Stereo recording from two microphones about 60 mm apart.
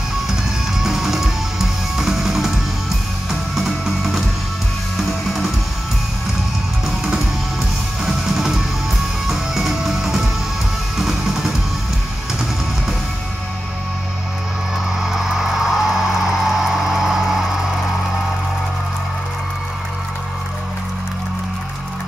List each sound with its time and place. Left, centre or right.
0.7 s music: centre
8.0 s music: centre
15.0 s music: centre